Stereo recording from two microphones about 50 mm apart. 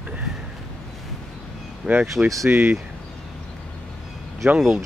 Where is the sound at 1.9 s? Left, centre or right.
Right.